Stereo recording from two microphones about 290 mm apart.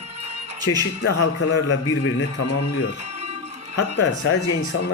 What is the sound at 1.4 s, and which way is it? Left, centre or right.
A man's voice, left.